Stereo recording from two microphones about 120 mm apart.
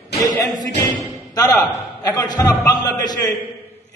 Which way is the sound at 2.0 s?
35° left (ahead or behind).